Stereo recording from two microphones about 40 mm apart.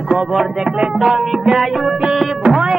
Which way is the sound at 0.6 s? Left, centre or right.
Right.